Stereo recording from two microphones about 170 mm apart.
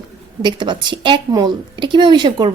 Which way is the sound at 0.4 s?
25° right (ahead or behind).